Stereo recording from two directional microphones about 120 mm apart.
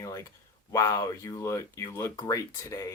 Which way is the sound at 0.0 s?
25° left (ahead or behind).